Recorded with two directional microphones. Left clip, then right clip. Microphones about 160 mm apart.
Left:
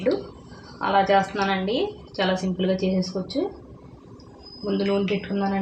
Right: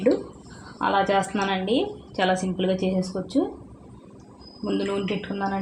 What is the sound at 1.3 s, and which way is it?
A woman's voice, 40° right (ahead or behind).